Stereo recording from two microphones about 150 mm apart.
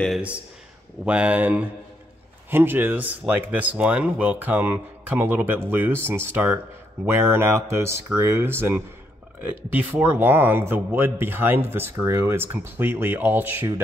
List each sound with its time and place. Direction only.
1.0 s speech: 10° right (ahead or behind)